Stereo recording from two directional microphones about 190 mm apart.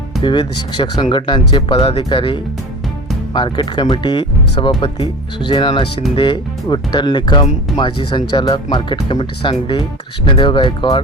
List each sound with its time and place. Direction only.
0.2 s speech: 25° left (ahead or behind)